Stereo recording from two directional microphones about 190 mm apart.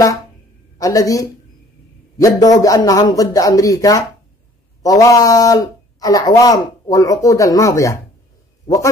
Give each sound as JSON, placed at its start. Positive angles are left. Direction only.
{"t": 0.7, "sound": "a man's voice", "side_deg": 15}